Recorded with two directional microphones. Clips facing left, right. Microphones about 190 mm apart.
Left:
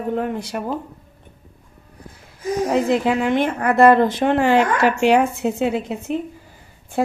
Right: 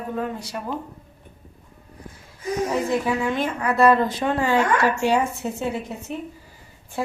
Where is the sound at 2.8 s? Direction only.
75° left (ahead or behind).